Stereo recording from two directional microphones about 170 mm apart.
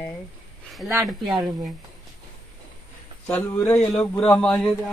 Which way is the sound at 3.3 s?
10° left (ahead or behind).